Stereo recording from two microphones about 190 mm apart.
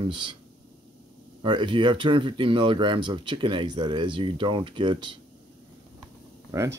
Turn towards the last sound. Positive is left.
turn(degrees=-15)  # may be behind; listen again after turning